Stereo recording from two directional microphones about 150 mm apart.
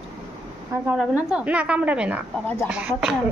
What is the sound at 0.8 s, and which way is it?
A woman's voice, 5° right (ahead or behind).